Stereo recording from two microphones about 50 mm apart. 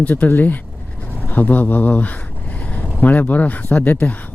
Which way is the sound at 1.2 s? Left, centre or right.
Left.